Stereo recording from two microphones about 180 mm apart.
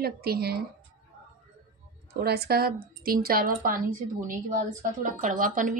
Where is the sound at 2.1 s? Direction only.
60° right (ahead or behind).